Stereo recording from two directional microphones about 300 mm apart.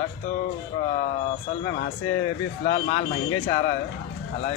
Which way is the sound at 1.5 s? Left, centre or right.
Left.